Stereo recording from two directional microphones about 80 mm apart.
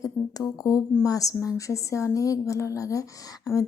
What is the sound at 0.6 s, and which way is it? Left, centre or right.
Speech, left.